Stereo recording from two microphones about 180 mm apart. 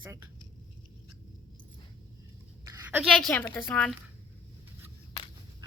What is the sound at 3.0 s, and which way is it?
Speech, centre (ahead or behind).